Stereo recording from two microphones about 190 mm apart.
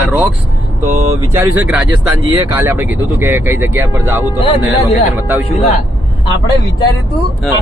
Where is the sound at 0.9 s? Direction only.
40° right (ahead or behind).